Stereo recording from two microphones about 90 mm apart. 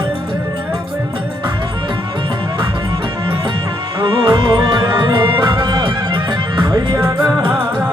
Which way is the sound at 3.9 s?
50° right (ahead or behind).